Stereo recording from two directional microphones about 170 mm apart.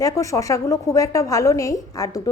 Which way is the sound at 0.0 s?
20° left (ahead or behind).